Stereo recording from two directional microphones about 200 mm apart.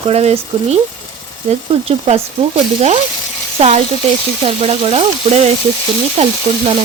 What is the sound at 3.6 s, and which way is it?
Speech, 30° right (ahead or behind).